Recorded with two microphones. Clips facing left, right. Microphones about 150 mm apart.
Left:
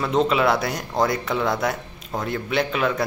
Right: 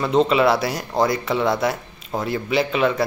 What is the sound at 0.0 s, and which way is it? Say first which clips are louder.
Speech: right 3 dB; centre (ahead or behind).